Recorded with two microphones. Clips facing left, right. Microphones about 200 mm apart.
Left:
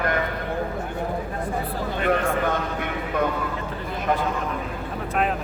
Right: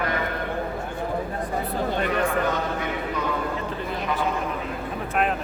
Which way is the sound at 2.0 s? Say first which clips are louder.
Left 4 dB; 55° left (ahead or behind).